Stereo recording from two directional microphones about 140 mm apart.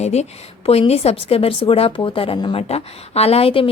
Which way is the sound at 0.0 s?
50° left (ahead or behind).